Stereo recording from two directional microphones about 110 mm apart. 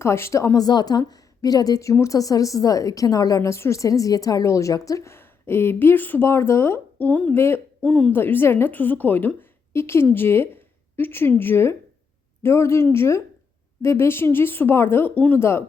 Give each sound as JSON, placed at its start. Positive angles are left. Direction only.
{"t": 0.0, "sound": "a woman's voice", "side_deg": 25}
{"t": 7.9, "sound": "a woman's voice", "side_deg": 5}
{"t": 8.1, "sound": "a woman's voice", "side_deg": 20}